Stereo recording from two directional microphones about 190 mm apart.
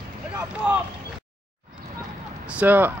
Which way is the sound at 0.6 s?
5° right (ahead or behind).